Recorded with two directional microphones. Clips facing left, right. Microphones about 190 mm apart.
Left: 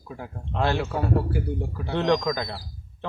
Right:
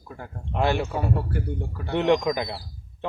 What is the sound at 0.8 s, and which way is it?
Speech, centre (ahead or behind).